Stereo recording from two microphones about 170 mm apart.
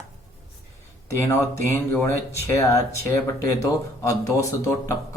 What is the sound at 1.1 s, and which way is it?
Speech, 15° left (ahead or behind).